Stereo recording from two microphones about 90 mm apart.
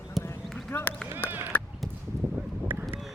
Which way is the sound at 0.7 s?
25° left (ahead or behind).